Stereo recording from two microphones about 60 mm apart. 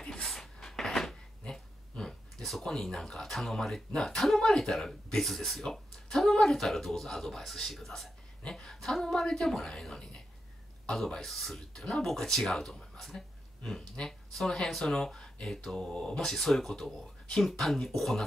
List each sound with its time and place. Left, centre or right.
0.0 s a sound: centre
1.4 s speech: centre
8.4 s speech: centre
11.2 s speech: centre